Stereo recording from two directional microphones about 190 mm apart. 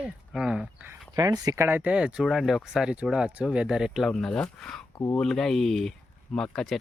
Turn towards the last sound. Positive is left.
turn(degrees=5)  # may be behind; listen again after turning